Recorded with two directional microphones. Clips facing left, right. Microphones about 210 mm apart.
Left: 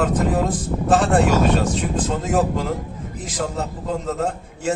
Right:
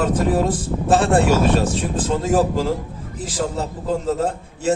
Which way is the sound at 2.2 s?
30° right (ahead or behind).